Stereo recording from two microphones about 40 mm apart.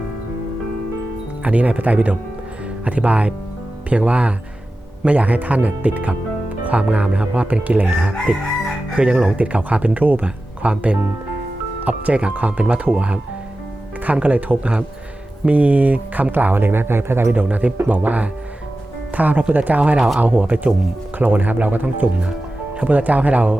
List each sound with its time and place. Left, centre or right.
1.5 s speech: right
7.9 s fowl: right
9.0 s speech: right
10.0 s speech: right
10.2 s speech: right
16.3 s speech: right
17.3 s speech: right
22.9 s speech: right